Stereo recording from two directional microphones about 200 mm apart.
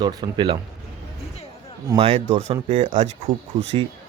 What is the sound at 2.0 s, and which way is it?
Speech, 30° right (ahead or behind).